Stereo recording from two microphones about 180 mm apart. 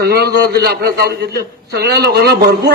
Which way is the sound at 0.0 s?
60° right (ahead or behind).